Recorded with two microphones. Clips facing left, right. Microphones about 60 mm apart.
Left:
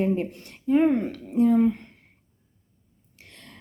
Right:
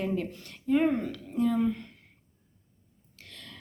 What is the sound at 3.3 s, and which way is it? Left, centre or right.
Whispering, left.